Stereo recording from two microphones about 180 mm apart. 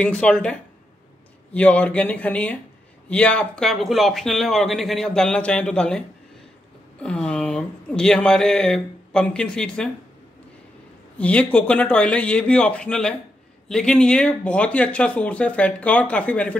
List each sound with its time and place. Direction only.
0.0 s speech: 5° left (ahead or behind)
11.1 s speech: 5° left (ahead or behind)